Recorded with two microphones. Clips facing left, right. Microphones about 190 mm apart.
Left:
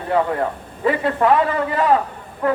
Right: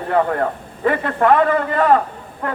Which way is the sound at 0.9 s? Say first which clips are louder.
Right 1 dB; 55° right (ahead or behind).